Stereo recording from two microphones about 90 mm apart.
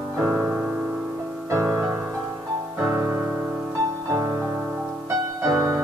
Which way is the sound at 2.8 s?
30° right (ahead or behind).